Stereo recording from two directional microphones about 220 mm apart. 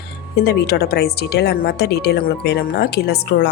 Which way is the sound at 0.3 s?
45° left (ahead or behind).